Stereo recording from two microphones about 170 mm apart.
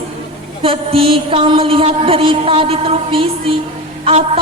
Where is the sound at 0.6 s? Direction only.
30° right (ahead or behind).